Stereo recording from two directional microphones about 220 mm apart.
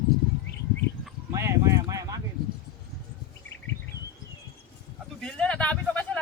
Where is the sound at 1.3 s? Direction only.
15° right (ahead or behind).